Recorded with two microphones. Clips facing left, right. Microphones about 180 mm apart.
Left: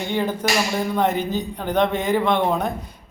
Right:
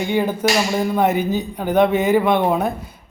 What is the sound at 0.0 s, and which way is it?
Speech, 10° right (ahead or behind).